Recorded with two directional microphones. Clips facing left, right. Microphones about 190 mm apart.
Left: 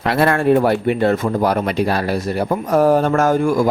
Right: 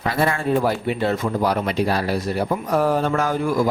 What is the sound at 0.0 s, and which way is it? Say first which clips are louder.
Speech: left 6 dB; 70° left (ahead or behind).